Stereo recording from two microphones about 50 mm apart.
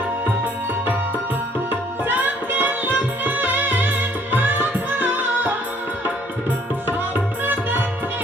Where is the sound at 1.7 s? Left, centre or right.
Right.